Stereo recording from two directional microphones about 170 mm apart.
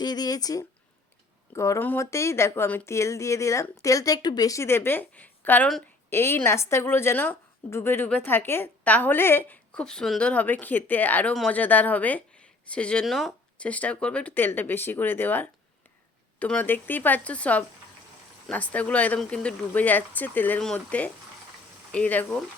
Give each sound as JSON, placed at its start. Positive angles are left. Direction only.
{"t": 0.0, "sound": "a woman's voice", "side_deg": 25}